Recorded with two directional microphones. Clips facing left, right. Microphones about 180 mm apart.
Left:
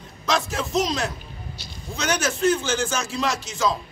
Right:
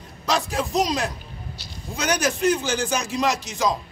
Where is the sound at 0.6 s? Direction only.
15° right (ahead or behind).